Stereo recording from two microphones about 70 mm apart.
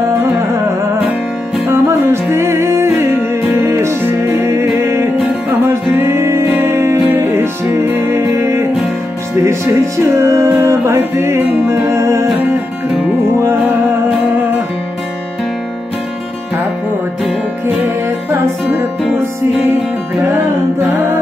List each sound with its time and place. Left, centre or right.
1.7 s music: right
10.1 s music: right
13.4 s music: right
20.8 s music: right